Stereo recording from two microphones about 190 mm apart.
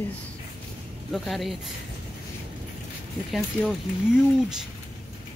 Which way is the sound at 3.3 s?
Centre (ahead or behind).